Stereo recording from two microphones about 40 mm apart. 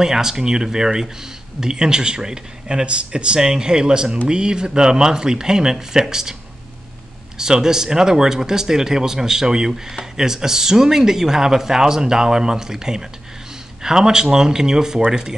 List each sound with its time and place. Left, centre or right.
0.0 s speech: centre
7.3 s speech: centre